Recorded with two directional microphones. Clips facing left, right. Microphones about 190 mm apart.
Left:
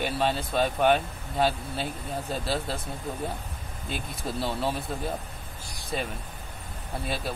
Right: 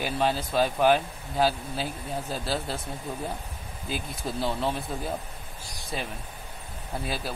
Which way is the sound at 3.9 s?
Centre (ahead or behind).